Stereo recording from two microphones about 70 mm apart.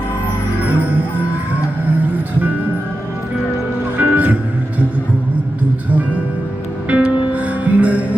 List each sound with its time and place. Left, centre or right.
3.9 s music: right
6.8 s music: right